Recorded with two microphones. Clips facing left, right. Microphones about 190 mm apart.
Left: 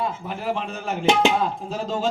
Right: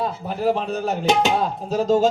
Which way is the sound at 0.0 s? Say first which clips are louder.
Right 5 dB; 40° right (ahead or behind).